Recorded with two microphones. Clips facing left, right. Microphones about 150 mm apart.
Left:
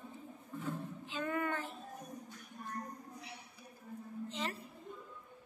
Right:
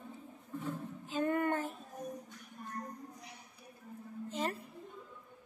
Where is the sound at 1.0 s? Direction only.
45° right (ahead or behind).